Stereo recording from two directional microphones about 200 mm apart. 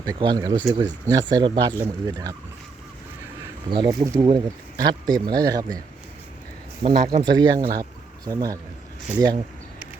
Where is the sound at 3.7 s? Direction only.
20° right (ahead or behind).